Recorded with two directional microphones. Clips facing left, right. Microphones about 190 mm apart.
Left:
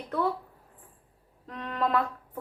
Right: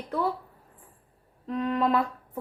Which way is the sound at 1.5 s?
5° right (ahead or behind).